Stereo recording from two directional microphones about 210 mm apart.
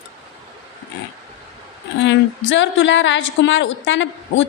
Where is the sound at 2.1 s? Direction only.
60° left (ahead or behind).